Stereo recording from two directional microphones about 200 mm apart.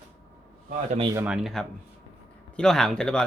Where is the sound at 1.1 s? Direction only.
5° right (ahead or behind).